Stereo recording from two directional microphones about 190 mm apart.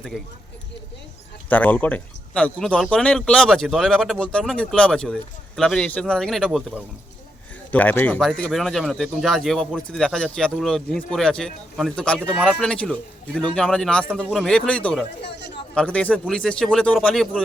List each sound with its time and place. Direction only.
1.5 s speech: 10° left (ahead or behind)
15.2 s speech: 60° left (ahead or behind)
15.7 s speech: 5° left (ahead or behind)